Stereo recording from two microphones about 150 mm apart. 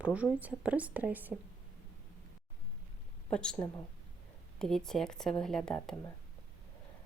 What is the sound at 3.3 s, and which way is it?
Speech, 5° left (ahead or behind).